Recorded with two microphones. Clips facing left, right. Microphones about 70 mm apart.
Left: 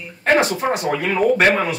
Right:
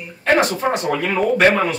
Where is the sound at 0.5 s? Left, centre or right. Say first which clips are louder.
Right 1 dB; centre.